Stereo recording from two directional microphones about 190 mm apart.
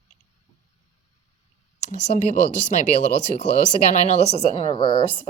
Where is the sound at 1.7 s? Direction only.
40° left (ahead or behind).